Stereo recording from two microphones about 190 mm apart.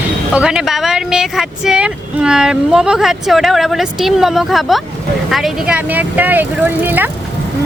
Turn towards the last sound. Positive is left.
turn(degrees=-10)  # may be behind; listen again after turning